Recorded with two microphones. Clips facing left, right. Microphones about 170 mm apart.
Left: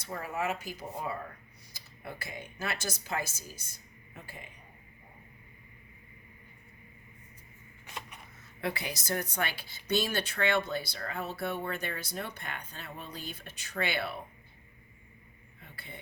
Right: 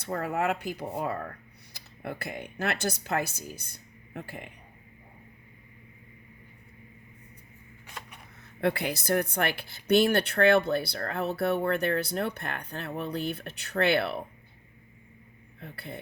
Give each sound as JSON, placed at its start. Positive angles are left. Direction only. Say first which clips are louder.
{"t": 0.0, "sound": "speech", "louder": "right 6 dB", "side_deg": -60}
{"t": 8.6, "sound": "speech", "louder": "right 8 dB", "side_deg": -60}
{"t": 15.6, "sound": "speech", "louder": "right 8 dB", "side_deg": -65}